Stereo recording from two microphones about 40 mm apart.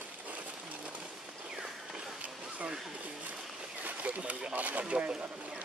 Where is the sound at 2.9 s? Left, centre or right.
Right.